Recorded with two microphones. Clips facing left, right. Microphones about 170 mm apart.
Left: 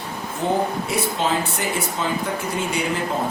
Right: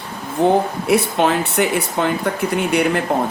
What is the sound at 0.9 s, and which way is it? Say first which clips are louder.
Speech: right 6 dB; 65° right (ahead or behind).